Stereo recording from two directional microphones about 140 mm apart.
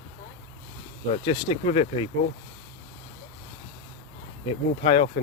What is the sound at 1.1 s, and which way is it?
Speech, 45° left (ahead or behind).